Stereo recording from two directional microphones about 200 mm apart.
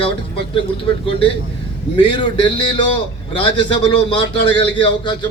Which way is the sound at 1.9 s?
25° left (ahead or behind).